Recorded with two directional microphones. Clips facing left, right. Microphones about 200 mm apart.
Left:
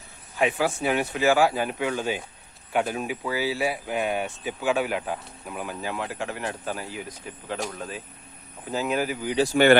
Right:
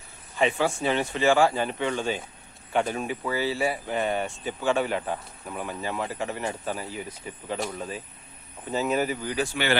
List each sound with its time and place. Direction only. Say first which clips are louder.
0.3 s speech: even; 5° left (ahead or behind)
9.3 s speech: left 13 dB; 40° left (ahead or behind)